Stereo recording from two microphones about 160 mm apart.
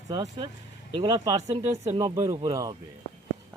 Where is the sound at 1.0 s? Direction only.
20° right (ahead or behind).